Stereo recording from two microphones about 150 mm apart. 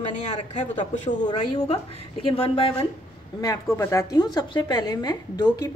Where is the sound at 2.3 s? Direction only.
40° left (ahead or behind).